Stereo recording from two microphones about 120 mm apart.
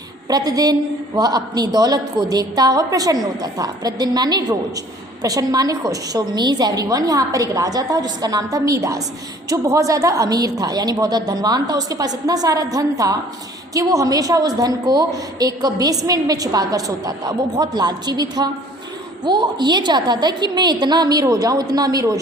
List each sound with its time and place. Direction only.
0.3 s a woman's voice: 30° right (ahead or behind)